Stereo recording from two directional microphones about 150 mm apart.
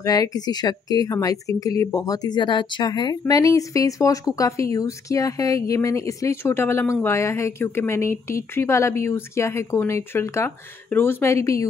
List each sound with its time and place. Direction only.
0.0 s speech: 25° left (ahead or behind)